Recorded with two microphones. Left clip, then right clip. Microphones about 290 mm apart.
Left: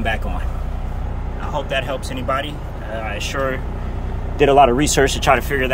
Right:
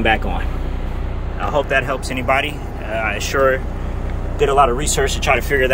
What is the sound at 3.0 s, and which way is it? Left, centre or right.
Speech, centre.